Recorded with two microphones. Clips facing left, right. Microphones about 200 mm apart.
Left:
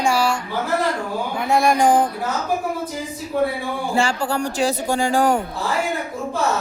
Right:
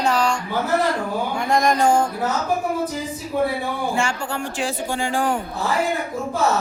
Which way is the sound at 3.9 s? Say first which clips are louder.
Left 4 dB; 35° left (ahead or behind).